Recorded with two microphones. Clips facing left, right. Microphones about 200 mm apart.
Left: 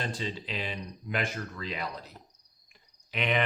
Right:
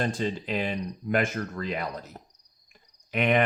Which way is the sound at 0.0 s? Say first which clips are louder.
Right 7 dB; 50° right (ahead or behind).